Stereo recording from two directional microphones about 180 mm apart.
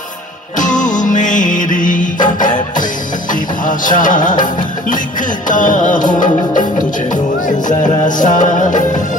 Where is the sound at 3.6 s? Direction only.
45° left (ahead or behind).